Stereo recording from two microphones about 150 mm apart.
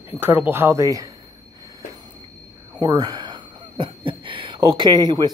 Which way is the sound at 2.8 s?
30° right (ahead or behind).